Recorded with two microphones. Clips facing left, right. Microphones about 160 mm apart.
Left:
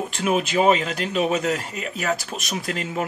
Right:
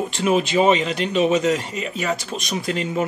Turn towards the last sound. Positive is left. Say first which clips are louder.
# right 4 dB
turn(degrees=0)  # may be behind; listen again after turning